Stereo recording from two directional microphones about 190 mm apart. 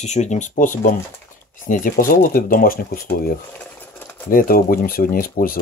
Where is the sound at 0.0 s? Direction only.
35° left (ahead or behind).